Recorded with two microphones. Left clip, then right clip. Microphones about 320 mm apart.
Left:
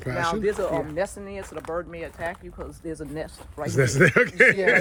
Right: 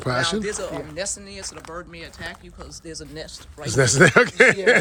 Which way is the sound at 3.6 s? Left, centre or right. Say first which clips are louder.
Right 4 dB; centre.